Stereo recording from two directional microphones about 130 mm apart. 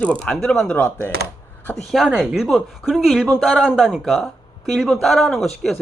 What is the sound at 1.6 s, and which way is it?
Speech, 5° left (ahead or behind).